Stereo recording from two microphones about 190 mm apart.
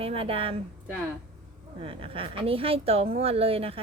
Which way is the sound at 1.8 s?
30° right (ahead or behind).